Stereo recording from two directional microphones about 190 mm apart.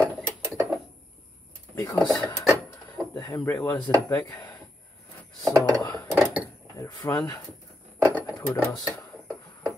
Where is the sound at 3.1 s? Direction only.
20° left (ahead or behind).